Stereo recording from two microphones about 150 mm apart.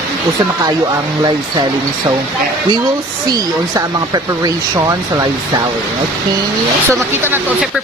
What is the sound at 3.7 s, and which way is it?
Speech, 25° right (ahead or behind).